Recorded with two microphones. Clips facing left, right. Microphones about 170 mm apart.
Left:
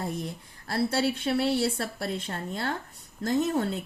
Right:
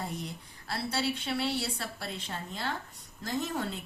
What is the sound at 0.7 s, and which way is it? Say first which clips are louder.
Speech: left 6 dB; 50° left (ahead or behind).